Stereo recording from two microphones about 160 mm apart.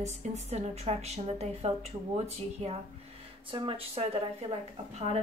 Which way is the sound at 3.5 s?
30° right (ahead or behind).